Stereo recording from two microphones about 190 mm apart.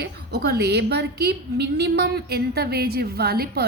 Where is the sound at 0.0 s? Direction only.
60° right (ahead or behind).